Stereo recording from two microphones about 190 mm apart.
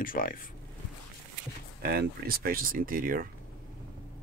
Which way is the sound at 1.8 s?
55° right (ahead or behind).